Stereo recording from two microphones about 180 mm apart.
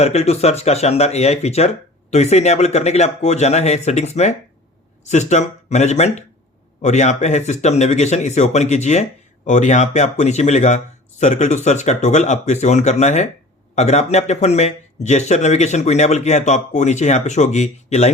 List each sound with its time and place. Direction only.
0.0 s speech: 35° left (ahead or behind)